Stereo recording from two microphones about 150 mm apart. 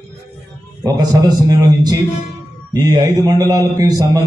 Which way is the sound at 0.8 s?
25° right (ahead or behind).